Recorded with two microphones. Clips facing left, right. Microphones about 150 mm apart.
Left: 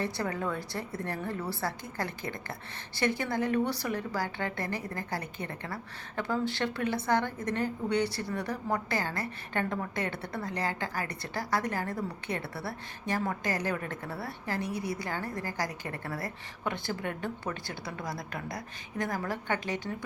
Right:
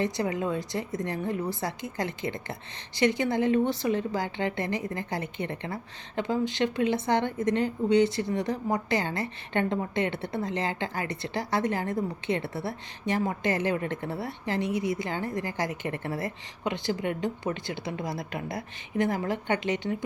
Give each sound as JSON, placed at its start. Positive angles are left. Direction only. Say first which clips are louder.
{"t": 0.0, "sound": "a woman's voice", "louder": "right 4 dB", "side_deg": -15}